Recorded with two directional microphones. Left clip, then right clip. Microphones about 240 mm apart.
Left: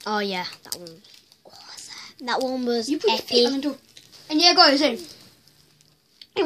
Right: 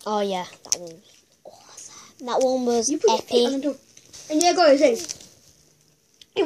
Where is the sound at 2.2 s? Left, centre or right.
Centre.